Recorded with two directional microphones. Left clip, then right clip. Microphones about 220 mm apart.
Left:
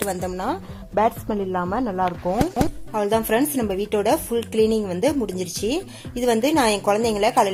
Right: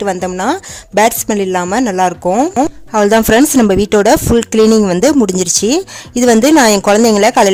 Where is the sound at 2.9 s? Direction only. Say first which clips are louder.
Right 12 dB; 40° right (ahead or behind).